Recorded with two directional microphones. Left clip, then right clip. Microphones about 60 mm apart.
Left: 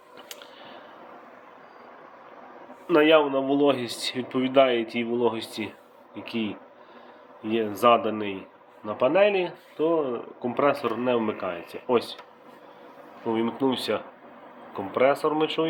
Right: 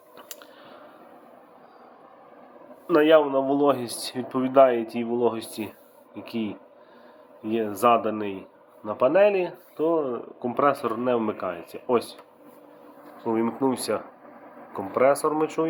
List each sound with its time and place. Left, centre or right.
2.8 s speech: centre
6.1 s speech: centre
13.4 s speech: right
14.9 s speech: right
15.6 s speech: centre